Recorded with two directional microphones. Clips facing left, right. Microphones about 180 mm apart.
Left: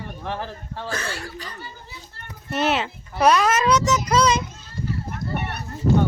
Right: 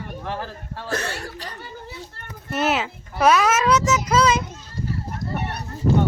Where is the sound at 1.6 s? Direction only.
65° right (ahead or behind).